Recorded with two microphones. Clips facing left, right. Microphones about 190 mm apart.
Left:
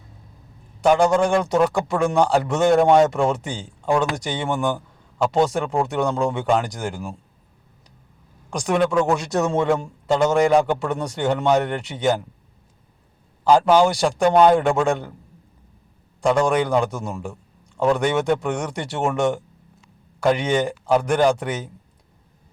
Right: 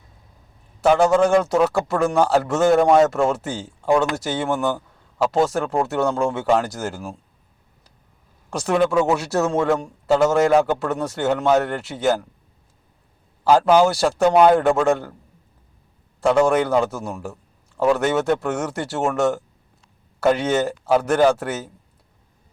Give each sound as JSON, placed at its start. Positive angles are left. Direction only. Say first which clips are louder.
{"t": 0.8, "sound": "a man's voice", "louder": "right 1 dB", "side_deg": -5}
{"t": 8.5, "sound": "a man's voice", "louder": "right 1 dB", "side_deg": -5}
{"t": 13.5, "sound": "a man's voice", "louder": "even", "side_deg": -5}
{"t": 16.2, "sound": "a man's voice", "louder": "right 2 dB", "side_deg": -5}